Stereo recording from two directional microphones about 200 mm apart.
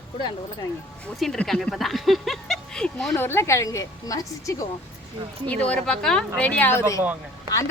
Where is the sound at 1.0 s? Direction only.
5° left (ahead or behind).